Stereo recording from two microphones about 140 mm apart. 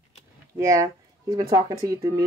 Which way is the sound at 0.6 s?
25° right (ahead or behind).